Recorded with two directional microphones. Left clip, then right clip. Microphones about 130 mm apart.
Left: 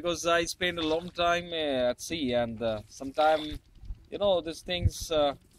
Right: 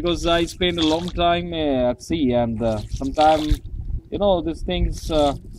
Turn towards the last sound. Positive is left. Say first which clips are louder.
# right 7 dB
turn(degrees=25)  # may be behind; listen again after turning